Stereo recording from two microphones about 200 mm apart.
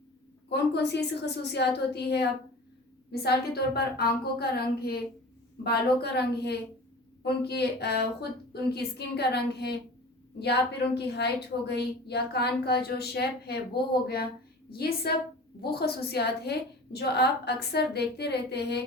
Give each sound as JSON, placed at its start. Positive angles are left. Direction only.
{"t": 0.5, "sound": "a woman's voice", "side_deg": 55}
{"t": 14.7, "sound": "a woman's voice", "side_deg": 50}